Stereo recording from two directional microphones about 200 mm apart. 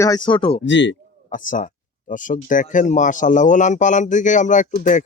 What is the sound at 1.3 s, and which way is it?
A man's voice, 40° left (ahead or behind).